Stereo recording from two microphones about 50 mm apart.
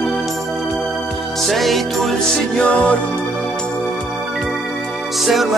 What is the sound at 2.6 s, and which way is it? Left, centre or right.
Music, left.